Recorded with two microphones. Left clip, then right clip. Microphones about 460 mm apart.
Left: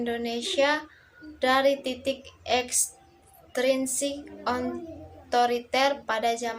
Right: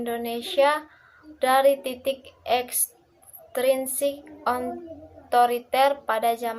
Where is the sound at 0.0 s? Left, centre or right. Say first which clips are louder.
Right 1 dB; right.